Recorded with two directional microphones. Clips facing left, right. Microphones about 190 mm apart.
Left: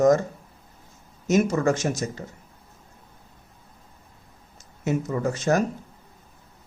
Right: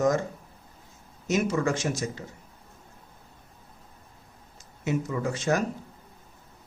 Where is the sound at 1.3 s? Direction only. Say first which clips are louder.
Left 4 dB; 40° left (ahead or behind).